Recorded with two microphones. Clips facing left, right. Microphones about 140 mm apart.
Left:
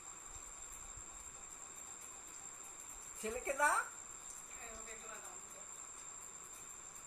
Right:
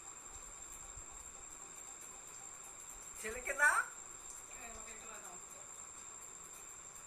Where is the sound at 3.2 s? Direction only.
25° left (ahead or behind).